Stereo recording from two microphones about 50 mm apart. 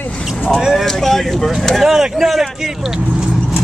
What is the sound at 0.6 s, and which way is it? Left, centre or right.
Speech, centre.